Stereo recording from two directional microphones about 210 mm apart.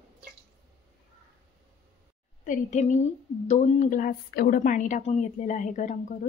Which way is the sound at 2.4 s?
35° left (ahead or behind).